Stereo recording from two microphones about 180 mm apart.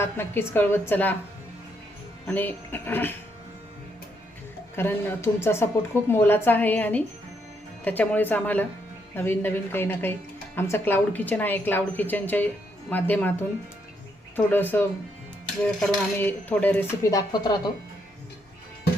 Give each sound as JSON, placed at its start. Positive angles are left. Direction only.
{"t": 0.0, "sound": "speech", "side_deg": 10}
{"t": 2.2, "sound": "speech", "side_deg": 10}
{"t": 4.7, "sound": "speech", "side_deg": 10}
{"t": 14.3, "sound": "speech", "side_deg": 10}